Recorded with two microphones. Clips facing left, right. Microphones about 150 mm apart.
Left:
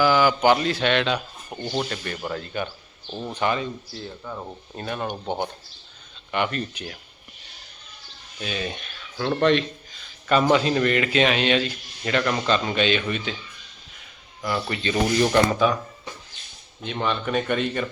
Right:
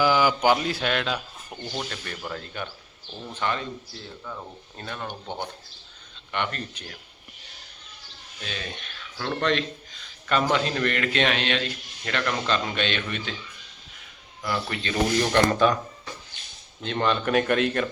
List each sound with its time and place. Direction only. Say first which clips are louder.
0.0 s speech: left 2 dB; 15° right (ahead or behind)
1.6 s speech: left 6 dB; 25° left (ahead or behind)
2.3 s speech: left 6 dB; centre (ahead or behind)
3.2 s speech: left 4 dB; 15° left (ahead or behind)
4.2 s speech: left 3 dB; 20° left (ahead or behind)
6.3 s speech: left 4 dB; 10° left (ahead or behind)
8.4 s speech: left 6 dB; 10° left (ahead or behind)
14.4 s speech: left 3 dB; centre (ahead or behind)
16.8 s speech: right 2 dB; 5° left (ahead or behind)